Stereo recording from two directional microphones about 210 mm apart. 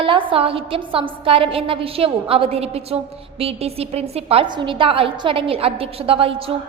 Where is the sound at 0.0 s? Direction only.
25° right (ahead or behind).